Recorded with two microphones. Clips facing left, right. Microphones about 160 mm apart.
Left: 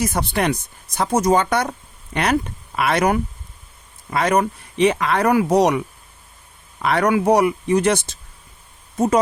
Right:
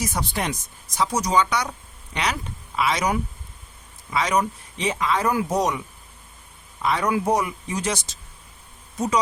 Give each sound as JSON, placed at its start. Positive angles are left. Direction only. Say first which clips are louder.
{"t": 0.0, "sound": "speech", "louder": "left 6 dB", "side_deg": 55}
{"t": 6.8, "sound": "speech", "louder": "left 5 dB", "side_deg": 70}